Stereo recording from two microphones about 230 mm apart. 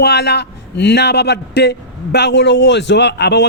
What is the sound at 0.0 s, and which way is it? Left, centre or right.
Speech, left.